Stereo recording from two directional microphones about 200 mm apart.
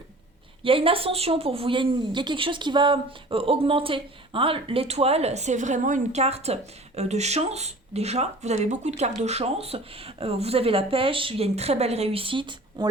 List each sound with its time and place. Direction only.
0.6 s speech: 25° right (ahead or behind)